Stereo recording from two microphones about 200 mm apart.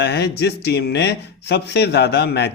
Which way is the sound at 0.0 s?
55° left (ahead or behind).